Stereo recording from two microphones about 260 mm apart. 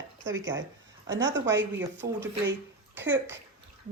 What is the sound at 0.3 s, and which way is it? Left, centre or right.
Speech, centre.